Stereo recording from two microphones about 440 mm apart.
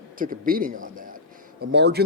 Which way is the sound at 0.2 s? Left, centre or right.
Centre.